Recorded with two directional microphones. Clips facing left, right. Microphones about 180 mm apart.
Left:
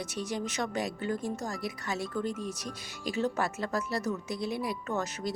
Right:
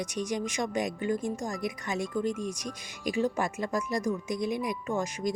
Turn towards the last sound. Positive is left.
turn(degrees=-15)  # may be behind; listen again after turning